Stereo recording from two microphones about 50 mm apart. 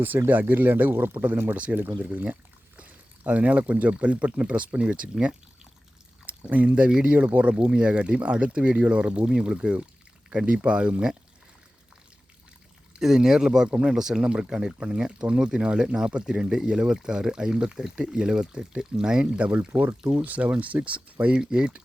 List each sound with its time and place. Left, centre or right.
0.3 s speech: right
1.5 s speech: right
6.2 s pour: right
6.7 s speech: right
13.0 s speech: centre
13.7 s speech: right
13.9 s speech: centre
19.4 s speech: right
21.3 s speech: centre